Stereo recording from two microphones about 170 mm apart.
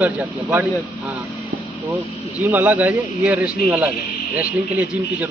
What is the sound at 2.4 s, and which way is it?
A man's voice, 10° right (ahead or behind).